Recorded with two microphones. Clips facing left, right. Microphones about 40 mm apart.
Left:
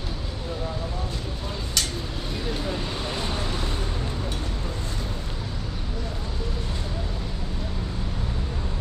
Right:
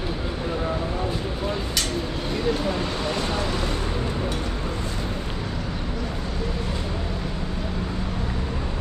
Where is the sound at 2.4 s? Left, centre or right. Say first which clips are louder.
Right 6 dB; right.